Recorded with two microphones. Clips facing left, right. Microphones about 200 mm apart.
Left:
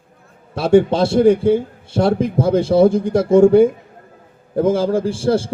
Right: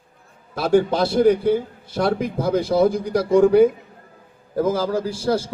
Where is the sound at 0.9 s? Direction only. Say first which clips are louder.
Left 3 dB; 25° left (ahead or behind).